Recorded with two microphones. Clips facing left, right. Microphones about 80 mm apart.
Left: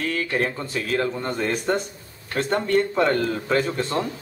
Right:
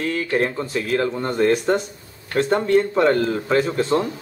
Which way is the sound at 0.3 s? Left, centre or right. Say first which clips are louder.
Right 4 dB; centre.